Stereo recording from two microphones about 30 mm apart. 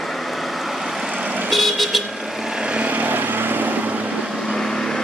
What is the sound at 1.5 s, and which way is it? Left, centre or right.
Vehicle, centre.